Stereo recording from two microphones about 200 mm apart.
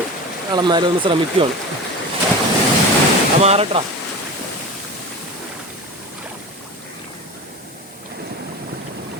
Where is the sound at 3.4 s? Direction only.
30° right (ahead or behind).